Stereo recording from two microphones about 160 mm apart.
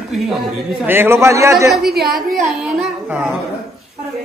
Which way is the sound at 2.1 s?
Centre (ahead or behind).